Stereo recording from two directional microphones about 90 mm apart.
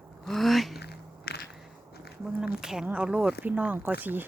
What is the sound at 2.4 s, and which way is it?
Speech, 5° right (ahead or behind).